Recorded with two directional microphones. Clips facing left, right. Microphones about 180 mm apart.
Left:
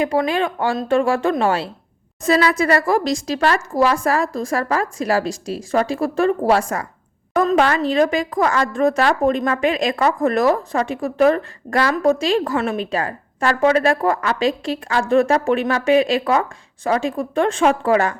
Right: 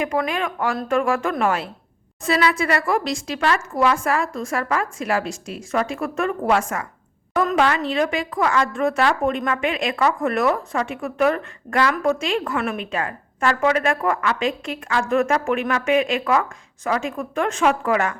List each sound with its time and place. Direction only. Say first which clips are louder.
0.0 s a woman's voice: left 4 dB; 30° left (ahead or behind)